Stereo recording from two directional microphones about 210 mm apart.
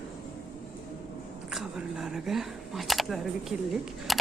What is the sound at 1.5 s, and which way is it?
Speech, centre (ahead or behind).